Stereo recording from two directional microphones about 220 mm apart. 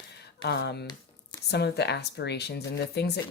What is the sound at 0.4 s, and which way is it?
Speech, 50° left (ahead or behind).